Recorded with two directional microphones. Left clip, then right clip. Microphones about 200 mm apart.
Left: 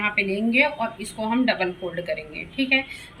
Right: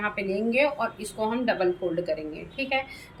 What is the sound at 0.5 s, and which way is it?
A woman's voice, 35° right (ahead or behind).